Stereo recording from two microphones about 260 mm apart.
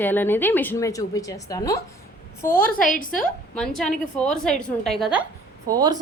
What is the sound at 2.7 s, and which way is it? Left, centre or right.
Speech, left.